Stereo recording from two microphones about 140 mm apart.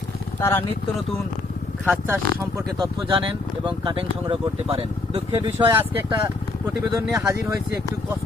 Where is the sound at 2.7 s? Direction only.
35° right (ahead or behind).